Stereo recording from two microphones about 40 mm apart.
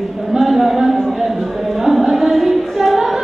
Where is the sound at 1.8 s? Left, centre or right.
Centre.